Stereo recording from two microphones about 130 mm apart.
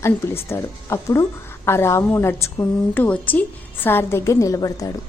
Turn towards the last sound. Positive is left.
turn(degrees=25)  # may be behind; listen again after turning